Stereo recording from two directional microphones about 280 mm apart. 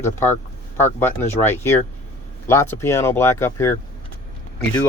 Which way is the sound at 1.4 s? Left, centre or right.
Centre.